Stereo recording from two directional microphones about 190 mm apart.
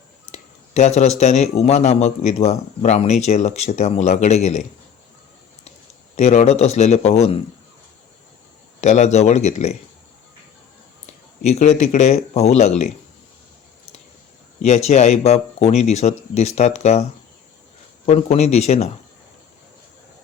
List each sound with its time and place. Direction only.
0.3 s a sound: 35° left (ahead or behind)
1.2 s a man's voice: 35° left (ahead or behind)
6.1 s a man's voice: 35° left (ahead or behind)
8.8 s a man's voice: 35° left (ahead or behind)
11.4 s a man's voice: 35° left (ahead or behind)
14.6 s a man's voice: 35° left (ahead or behind)